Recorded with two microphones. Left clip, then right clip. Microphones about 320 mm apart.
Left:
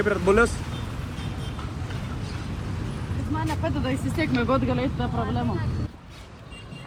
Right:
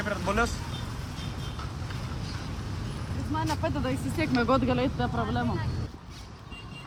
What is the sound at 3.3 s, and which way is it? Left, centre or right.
Speech, centre.